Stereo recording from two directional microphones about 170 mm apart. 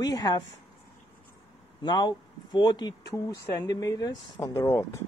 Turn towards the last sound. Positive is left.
turn(degrees=15)  # may be behind; listen again after turning